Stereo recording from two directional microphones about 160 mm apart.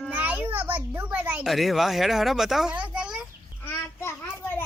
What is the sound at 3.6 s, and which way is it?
Child singing, 15° left (ahead or behind).